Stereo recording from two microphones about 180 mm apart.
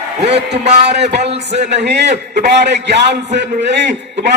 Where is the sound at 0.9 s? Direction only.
70° right (ahead or behind).